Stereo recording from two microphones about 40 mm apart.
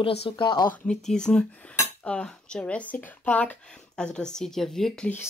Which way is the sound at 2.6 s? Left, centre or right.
Left.